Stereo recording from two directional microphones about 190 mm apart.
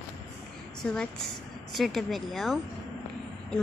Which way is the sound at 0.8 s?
5° left (ahead or behind).